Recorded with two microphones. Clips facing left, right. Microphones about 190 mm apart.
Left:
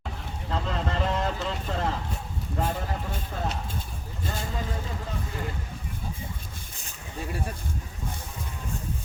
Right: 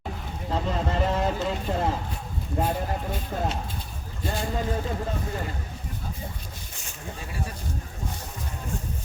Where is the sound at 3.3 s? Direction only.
40° right (ahead or behind).